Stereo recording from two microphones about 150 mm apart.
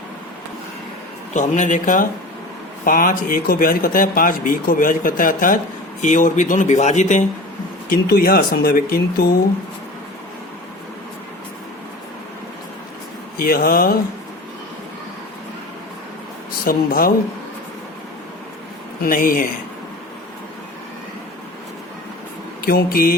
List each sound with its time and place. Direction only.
1.3 s speech: 55° left (ahead or behind)
7.9 s speech: 85° left
13.3 s speech: 80° left
16.5 s a woman's voice: 75° left (ahead or behind)
19.0 s speech: 70° left (ahead or behind)
22.6 s speech: 85° left